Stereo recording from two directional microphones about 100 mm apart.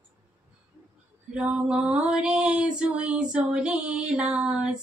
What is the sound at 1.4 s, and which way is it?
Mantra, 15° right (ahead or behind).